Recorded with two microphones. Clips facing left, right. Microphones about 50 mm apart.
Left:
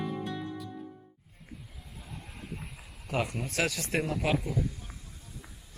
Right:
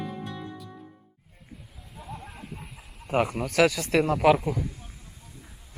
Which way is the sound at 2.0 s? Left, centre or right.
Centre.